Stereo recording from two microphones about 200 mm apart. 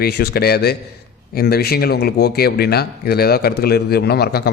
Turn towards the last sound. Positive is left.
turn(degrees=55)  # may be behind; listen again after turning